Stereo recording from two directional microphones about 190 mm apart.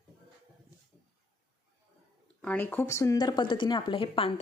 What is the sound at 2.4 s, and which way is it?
A woman's voice, 10° left (ahead or behind).